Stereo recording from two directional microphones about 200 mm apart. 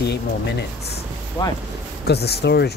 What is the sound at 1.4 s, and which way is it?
Speech, 20° left (ahead or behind).